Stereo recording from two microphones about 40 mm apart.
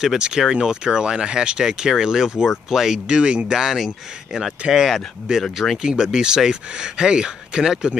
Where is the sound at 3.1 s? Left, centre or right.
Right.